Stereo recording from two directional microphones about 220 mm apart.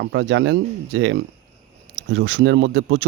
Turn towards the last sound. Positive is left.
turn(degrees=-55)  # may be behind; listen again after turning